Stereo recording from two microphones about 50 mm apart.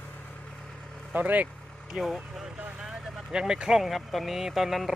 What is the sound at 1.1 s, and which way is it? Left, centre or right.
Speech, right.